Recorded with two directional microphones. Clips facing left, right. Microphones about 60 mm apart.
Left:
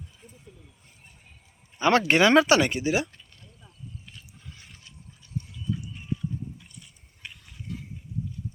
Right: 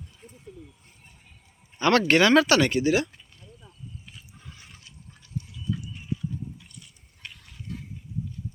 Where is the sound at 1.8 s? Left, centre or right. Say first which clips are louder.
Even; centre.